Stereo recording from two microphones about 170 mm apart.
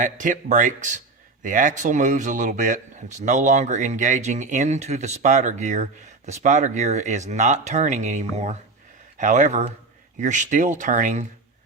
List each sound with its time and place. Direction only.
0.0 s speech: 50° right (ahead or behind)